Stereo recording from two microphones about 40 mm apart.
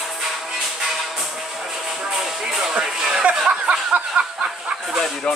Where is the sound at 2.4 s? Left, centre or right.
Centre.